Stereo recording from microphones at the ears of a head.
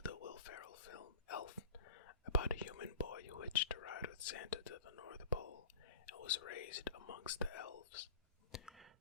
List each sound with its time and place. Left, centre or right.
0.0 s whispering: left